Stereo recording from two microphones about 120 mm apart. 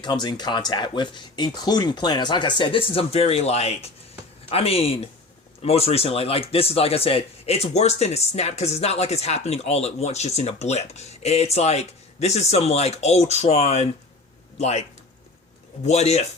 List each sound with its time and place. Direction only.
0.0 s speech: 35° left (ahead or behind); by 16.3 s 65° left (ahead or behind)